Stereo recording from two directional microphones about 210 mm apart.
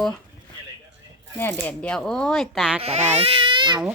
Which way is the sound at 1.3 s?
10° left (ahead or behind).